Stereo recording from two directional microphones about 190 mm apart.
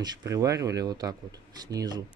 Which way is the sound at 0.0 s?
15° right (ahead or behind).